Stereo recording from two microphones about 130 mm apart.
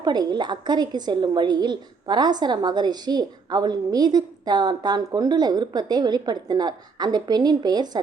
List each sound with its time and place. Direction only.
0.0 s a woman's voice: 30° right (ahead or behind)